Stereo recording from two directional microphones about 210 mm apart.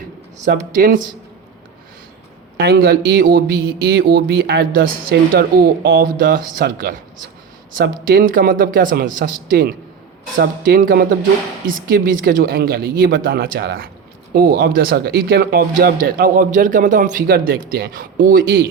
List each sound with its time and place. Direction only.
0.4 s a man's voice: 40° right (ahead or behind)
2.6 s speech: 50° right (ahead or behind)
8.0 s a man's voice: 40° right (ahead or behind)